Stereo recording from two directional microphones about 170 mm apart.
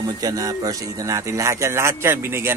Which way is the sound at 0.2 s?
20° right (ahead or behind).